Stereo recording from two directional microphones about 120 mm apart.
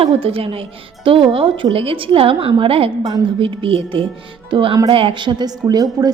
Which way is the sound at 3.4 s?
50° right (ahead or behind).